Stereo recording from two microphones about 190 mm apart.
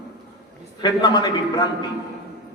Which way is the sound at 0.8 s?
20° left (ahead or behind).